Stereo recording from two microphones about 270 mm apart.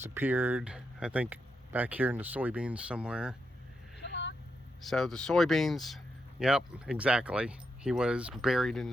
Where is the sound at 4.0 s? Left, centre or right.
Left.